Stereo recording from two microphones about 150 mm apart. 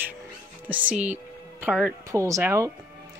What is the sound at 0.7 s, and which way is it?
Speech, 10° right (ahead or behind).